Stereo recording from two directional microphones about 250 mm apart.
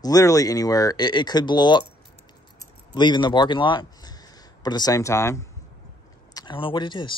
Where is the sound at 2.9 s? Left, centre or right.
Centre.